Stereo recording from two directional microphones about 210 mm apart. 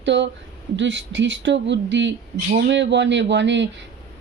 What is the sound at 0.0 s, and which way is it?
Speech, 55° right (ahead or behind).